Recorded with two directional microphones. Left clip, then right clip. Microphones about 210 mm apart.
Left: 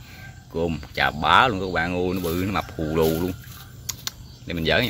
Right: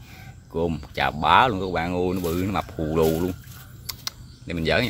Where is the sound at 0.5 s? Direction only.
10° right (ahead or behind).